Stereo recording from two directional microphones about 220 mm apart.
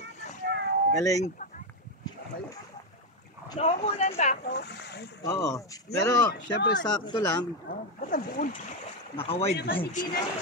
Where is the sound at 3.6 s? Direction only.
30° left (ahead or behind).